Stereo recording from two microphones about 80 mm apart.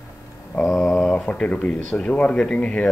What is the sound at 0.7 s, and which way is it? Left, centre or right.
Speech, centre.